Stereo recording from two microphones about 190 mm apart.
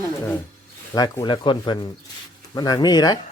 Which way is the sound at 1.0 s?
20° left (ahead or behind).